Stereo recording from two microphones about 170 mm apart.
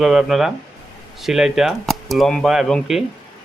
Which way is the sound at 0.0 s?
Centre (ahead or behind).